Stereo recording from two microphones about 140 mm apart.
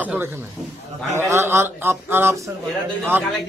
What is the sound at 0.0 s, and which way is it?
A man's voice, 10° right (ahead or behind).